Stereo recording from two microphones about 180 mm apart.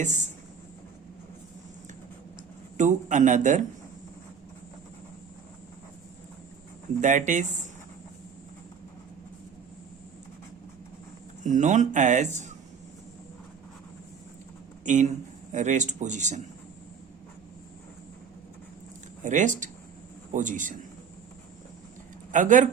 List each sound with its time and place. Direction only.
0.0 s speech: 40° right (ahead or behind)
2.7 s speech: 45° right (ahead or behind)
7.0 s speech: 45° right (ahead or behind)
11.4 s speech: 45° right (ahead or behind)
14.8 s speech: 45° right (ahead or behind)
19.2 s speech: 45° right (ahead or behind)
22.3 s speech: 45° right (ahead or behind)